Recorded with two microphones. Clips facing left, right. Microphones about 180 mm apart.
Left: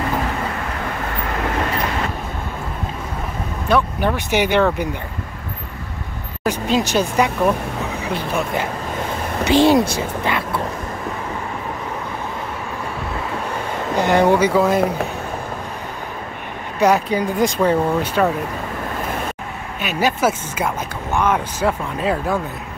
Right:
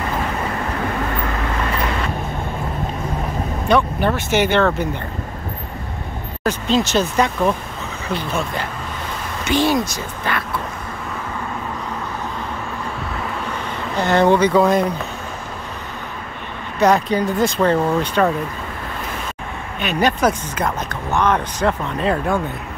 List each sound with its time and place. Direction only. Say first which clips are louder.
3.6 s speech: right 1 dB; 10° left (ahead or behind)
6.4 s speech: even; 15° left (ahead or behind)
9.4 s speech: left 4 dB; 30° left (ahead or behind)
13.9 s speech: even; 15° left (ahead or behind)
16.8 s speech: right 1 dB; 10° left (ahead or behind)
19.8 s speech: right 1 dB; 5° left (ahead or behind)